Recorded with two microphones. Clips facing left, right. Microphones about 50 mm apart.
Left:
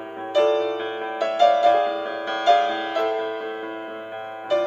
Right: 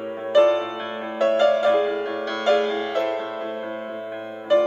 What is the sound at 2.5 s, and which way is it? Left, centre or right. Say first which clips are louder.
Music: left 1 dB; left.